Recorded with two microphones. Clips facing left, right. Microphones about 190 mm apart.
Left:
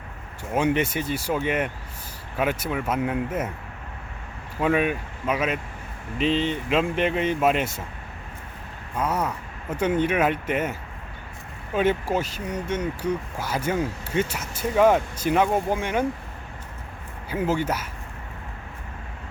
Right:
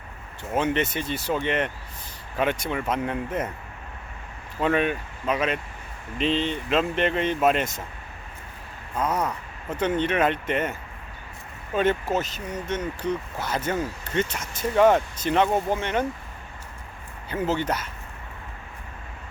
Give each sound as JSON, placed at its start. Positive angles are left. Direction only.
{"t": 0.5, "sound": "speech", "side_deg": 10}
{"t": 4.6, "sound": "speech", "side_deg": 5}
{"t": 9.0, "sound": "speech", "side_deg": 10}
{"t": 17.2, "sound": "speech", "side_deg": 10}